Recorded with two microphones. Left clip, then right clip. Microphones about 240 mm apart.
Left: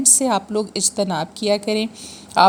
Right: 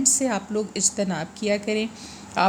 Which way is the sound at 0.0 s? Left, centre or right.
Left.